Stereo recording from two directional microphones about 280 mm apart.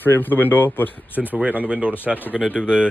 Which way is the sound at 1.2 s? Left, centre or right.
Centre.